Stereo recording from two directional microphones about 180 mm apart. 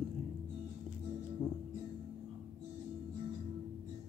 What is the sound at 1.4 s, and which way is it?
Music, 5° right (ahead or behind).